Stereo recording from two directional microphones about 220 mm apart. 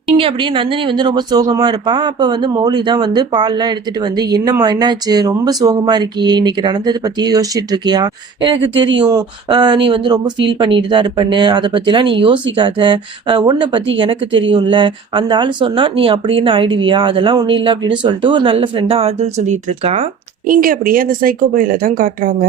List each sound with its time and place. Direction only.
0.2 s speech: 25° right (ahead or behind)
20.5 s speech: 40° right (ahead or behind)